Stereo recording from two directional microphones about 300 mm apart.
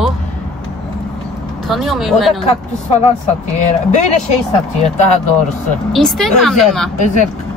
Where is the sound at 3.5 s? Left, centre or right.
Left.